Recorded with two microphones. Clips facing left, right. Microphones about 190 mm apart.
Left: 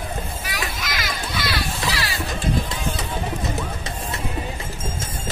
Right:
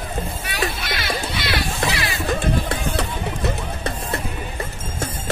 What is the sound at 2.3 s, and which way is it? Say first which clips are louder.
Music: right 4 dB; 60° right (ahead or behind).